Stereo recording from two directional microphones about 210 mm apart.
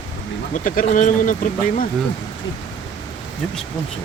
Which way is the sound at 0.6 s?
40° left (ahead or behind).